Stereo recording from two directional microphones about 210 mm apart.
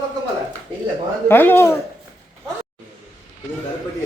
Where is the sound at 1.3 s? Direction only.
10° left (ahead or behind).